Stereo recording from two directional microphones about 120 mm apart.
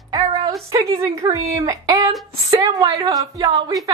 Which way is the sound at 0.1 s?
25° right (ahead or behind).